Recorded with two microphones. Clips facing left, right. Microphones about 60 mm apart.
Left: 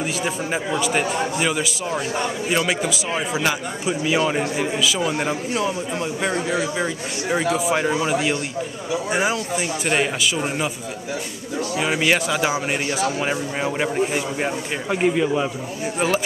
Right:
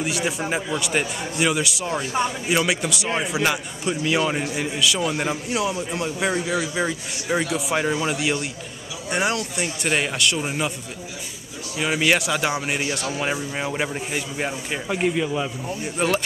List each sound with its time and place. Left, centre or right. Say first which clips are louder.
0.0 s a man's voice: even; centre
11.8 s a man's voice: even; centre
15.8 s a man's voice: left 2 dB; centre